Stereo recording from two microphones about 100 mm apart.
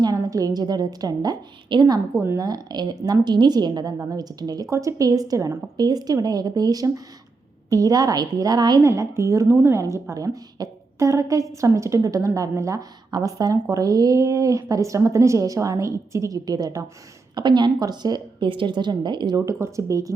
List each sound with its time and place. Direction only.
0.0 s a woman's voice: 35° right (ahead or behind)
2.1 s a woman's voice: 30° right (ahead or behind)
3.9 s a woman's voice: 25° right (ahead or behind)
4.2 s a woman's voice: 40° right (ahead or behind)
8.9 s a woman's voice: 30° right (ahead or behind); by 19.4 s 50° right (ahead or behind)
19.5 s a woman's voice: 30° right (ahead or behind)